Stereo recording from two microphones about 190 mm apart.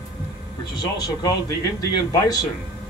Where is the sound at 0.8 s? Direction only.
20° left (ahead or behind).